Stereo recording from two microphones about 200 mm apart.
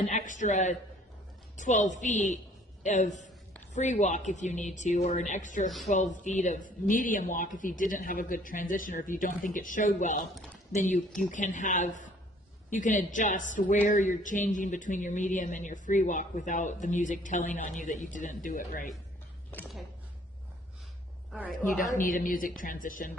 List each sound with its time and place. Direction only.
0.1 s a woman's voice: 40° left (ahead or behind)
19.5 s speech: 10° left (ahead or behind)
21.8 s a woman's voice: 45° left (ahead or behind)